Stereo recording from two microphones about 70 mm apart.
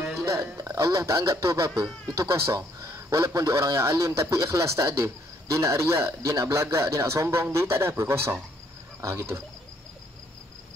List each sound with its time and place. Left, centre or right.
0.1 s speech: right